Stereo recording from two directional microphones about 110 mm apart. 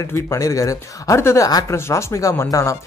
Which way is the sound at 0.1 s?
30° left (ahead or behind).